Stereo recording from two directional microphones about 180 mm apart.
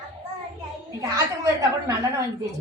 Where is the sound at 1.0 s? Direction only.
20° right (ahead or behind).